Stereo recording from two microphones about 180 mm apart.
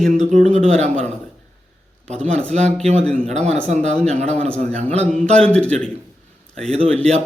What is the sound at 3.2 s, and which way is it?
A man's voice, 40° right (ahead or behind).